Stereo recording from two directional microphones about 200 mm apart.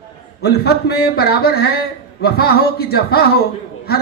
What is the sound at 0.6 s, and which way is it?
Speech, 50° left (ahead or behind).